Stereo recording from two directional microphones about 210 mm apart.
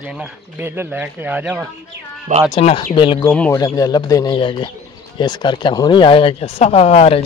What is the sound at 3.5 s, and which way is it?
Speech, 15° left (ahead or behind).